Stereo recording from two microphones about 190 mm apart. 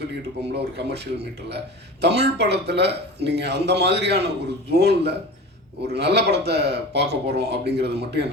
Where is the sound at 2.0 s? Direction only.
60° right (ahead or behind).